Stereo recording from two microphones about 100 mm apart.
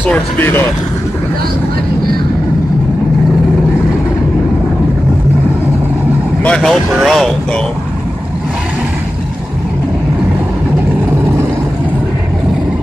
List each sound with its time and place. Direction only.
0.0 s speech: 20° left (ahead or behind)
6.4 s speech: 5° left (ahead or behind)